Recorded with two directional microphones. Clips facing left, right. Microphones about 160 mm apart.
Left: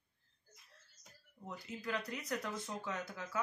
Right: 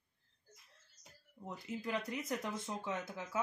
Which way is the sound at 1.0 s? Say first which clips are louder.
Right 2 dB; 20° right (ahead or behind).